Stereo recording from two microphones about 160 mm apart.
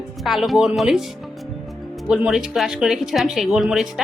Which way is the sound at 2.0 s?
5° right (ahead or behind).